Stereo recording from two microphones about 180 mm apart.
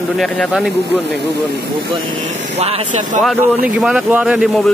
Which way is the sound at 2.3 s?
35° right (ahead or behind).